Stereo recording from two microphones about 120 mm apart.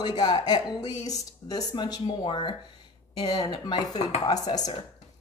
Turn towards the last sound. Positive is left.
turn(degrees=35)  # may be behind; listen again after turning